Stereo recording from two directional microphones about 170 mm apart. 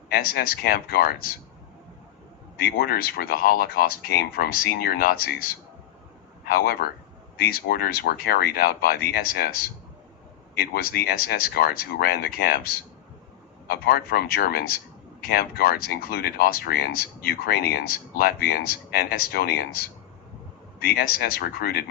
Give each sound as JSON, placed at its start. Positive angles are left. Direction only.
{"t": 0.1, "sound": "speech", "side_deg": 65}
{"t": 2.7, "sound": "speech", "side_deg": 60}